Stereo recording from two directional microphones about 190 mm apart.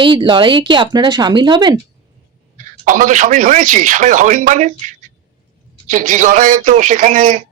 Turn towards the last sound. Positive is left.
turn(degrees=-40)  # may be behind; listen again after turning